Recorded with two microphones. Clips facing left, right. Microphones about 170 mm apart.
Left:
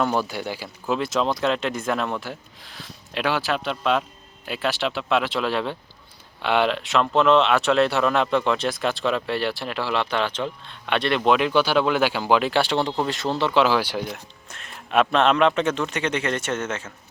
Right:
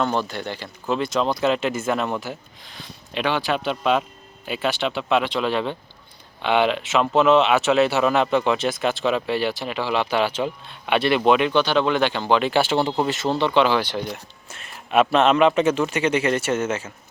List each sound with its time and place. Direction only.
0.0 s a man's voice: 10° left (ahead or behind); by 16.9 s 10° right (ahead or behind)